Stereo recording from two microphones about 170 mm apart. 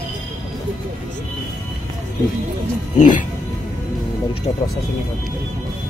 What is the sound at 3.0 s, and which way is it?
Speech, 50° left (ahead or behind).